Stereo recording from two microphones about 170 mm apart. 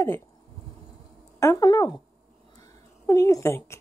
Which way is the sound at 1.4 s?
20° left (ahead or behind).